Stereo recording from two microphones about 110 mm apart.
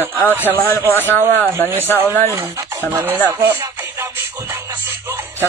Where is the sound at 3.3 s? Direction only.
25° right (ahead or behind).